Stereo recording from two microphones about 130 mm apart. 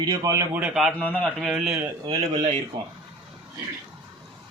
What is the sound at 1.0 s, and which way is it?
Speech, 10° left (ahead or behind).